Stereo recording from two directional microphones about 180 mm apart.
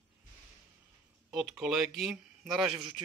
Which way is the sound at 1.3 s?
5° right (ahead or behind).